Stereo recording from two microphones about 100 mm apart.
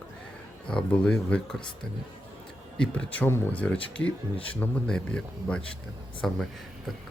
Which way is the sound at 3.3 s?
25° left (ahead or behind).